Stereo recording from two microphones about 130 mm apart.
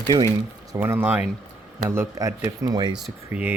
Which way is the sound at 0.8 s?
15° right (ahead or behind).